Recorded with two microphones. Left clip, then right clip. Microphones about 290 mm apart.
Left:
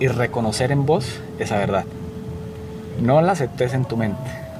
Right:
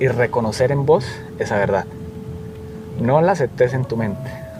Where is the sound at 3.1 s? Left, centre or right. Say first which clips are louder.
Right 1 dB; right.